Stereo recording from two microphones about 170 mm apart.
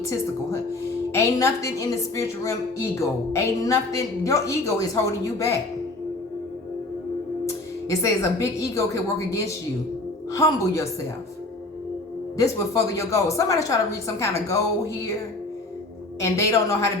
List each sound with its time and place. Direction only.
0.0 s a woman's voice: 15° left (ahead or behind)
7.4 s a woman's voice: 15° left (ahead or behind)
12.4 s a woman's voice: 20° left (ahead or behind)
16.2 s a woman's voice: 15° left (ahead or behind)